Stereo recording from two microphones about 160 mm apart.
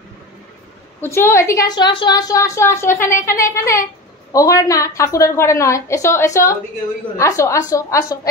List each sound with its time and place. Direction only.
1.0 s a woman's voice: 15° left (ahead or behind)